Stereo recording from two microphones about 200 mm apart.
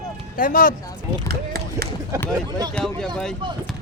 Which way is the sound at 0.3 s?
45° left (ahead or behind).